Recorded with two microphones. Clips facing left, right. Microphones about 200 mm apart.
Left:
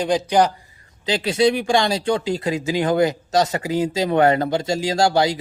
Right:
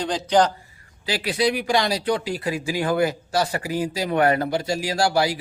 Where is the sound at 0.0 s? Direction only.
10° left (ahead or behind).